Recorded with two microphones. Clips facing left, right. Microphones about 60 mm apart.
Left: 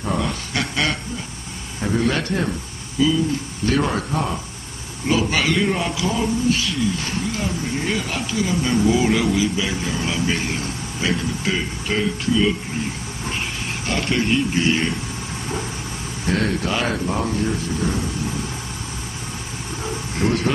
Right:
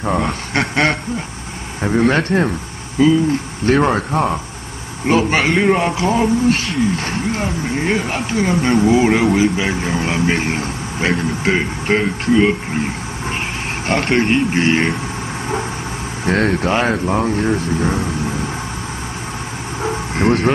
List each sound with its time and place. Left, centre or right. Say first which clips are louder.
0.0 s speech: right 5 dB; right
13.8 s speech: right 6 dB; right
16.3 s speech: right 5 dB; right
17.6 s speech: right 5 dB; right
19.8 s vehicle: right 6 dB; right